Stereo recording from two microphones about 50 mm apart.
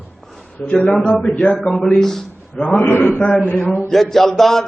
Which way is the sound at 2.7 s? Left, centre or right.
Left.